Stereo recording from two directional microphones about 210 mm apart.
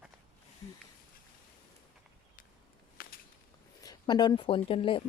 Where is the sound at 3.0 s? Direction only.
45° left (ahead or behind).